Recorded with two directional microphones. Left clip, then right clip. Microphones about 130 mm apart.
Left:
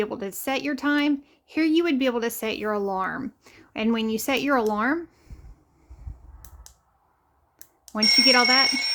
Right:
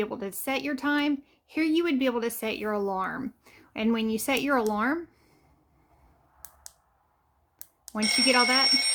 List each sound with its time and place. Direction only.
0.0 s speech: 25° left (ahead or behind)
6.4 s a sound: centre (ahead or behind)
8.0 s speech: 25° right (ahead or behind)
8.3 s speech: 25° left (ahead or behind)